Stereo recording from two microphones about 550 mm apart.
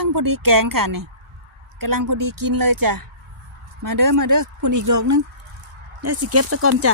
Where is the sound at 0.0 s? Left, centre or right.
Right.